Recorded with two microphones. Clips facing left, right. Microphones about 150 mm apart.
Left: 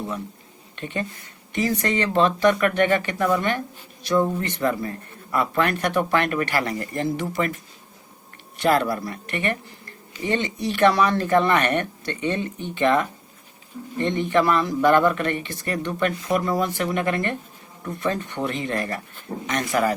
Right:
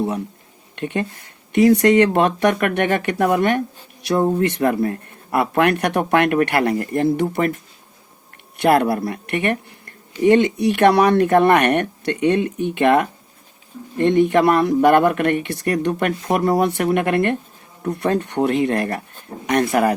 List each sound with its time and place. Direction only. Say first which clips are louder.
0.8 s speech: right 6 dB; 65° right (ahead or behind)
8.5 s speech: right 5 dB; 65° right (ahead or behind)